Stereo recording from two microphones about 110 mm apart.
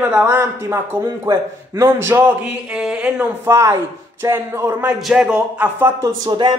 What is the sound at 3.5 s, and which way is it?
A man's voice, 25° right (ahead or behind).